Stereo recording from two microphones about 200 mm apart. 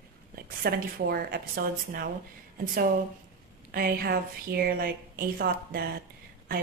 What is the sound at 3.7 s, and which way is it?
A woman's voice, 50° right (ahead or behind).